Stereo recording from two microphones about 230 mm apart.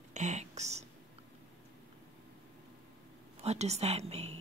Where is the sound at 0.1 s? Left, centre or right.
Right.